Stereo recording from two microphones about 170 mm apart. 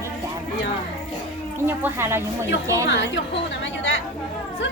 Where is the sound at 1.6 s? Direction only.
15° right (ahead or behind).